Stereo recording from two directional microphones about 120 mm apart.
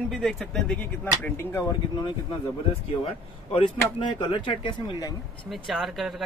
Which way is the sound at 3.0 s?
50° left (ahead or behind).